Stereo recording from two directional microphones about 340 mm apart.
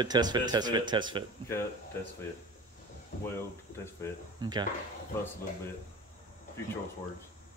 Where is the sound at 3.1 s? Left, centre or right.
Left.